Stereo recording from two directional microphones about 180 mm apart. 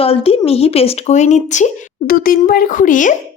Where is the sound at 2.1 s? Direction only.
55° left (ahead or behind).